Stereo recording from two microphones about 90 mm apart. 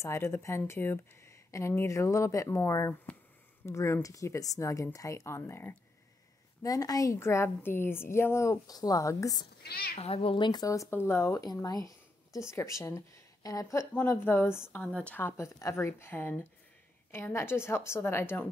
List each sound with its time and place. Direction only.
0.0 s a woman's voice: 30° left (ahead or behind)
6.6 s a woman's voice: 40° left (ahead or behind)
10.1 s speech: 80° left; by 10.7 s 55° left (ahead or behind)
10.7 s a woman's voice: 35° left (ahead or behind)
11.4 s speech: 45° left (ahead or behind)
14.1 s a woman's voice: 25° left (ahead or behind)
14.8 s speech: 10° left (ahead or behind)
15.1 s a woman's voice: 30° left (ahead or behind)